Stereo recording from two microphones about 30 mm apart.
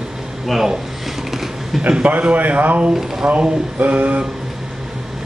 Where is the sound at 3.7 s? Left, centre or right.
Right.